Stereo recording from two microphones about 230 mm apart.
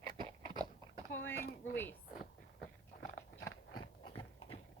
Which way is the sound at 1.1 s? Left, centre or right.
Centre.